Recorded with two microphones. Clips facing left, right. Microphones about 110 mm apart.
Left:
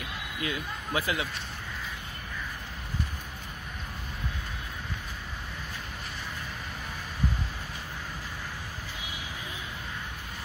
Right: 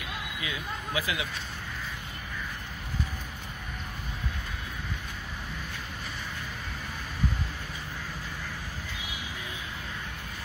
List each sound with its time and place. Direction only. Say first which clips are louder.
0.4 s speech: left 5 dB; 45° left (ahead or behind)